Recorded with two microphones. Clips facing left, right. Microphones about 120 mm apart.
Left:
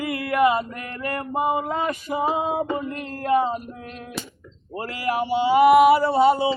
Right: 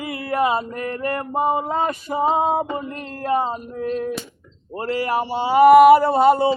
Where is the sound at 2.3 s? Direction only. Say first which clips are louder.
Right 3 dB; 35° right (ahead or behind).